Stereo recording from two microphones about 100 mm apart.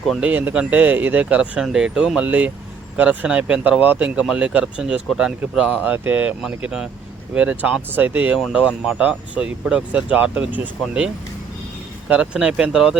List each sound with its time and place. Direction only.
0.2 s speech: 15° right (ahead or behind)
8.4 s speech: centre (ahead or behind)
8.9 s speech: 15° right (ahead or behind)